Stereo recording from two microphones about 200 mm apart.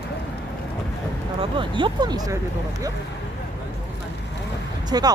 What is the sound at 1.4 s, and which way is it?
Speech, 25° right (ahead or behind).